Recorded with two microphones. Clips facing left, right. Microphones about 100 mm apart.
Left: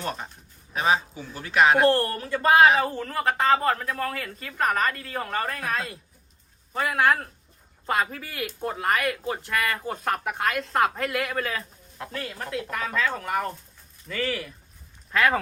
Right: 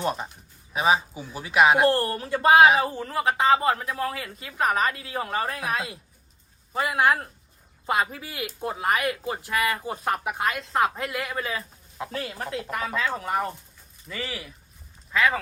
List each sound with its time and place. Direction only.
0.0 s speech: 15° right (ahead or behind); by 15.4 s centre (ahead or behind)